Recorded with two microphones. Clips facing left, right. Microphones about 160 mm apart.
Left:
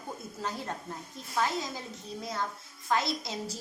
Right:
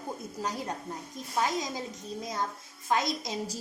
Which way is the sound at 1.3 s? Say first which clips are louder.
Right 1 dB; 15° right (ahead or behind).